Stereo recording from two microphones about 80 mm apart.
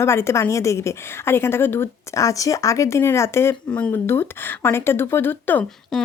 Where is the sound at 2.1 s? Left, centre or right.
Left.